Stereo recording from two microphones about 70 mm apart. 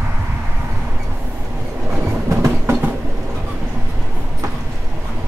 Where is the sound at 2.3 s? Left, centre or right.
Right.